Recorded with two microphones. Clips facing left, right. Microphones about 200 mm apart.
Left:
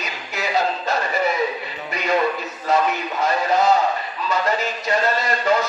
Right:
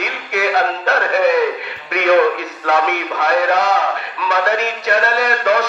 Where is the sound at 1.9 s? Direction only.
70° right (ahead or behind).